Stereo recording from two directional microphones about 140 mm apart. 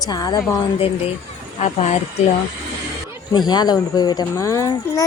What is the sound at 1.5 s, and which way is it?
Speech, 55° left (ahead or behind).